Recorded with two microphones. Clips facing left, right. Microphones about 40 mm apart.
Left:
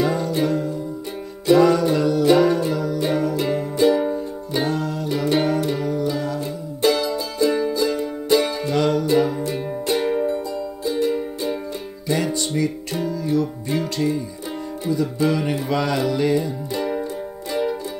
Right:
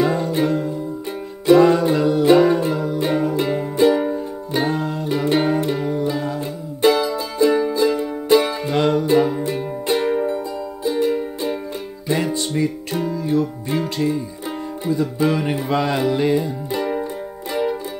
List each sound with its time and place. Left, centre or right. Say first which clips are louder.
0.0 s music: right 2 dB; centre
4.8 s music: right 2 dB; centre